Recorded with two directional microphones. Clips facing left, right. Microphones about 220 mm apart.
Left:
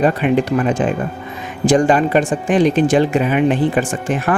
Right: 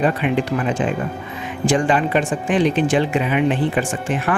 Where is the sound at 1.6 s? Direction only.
40° left (ahead or behind).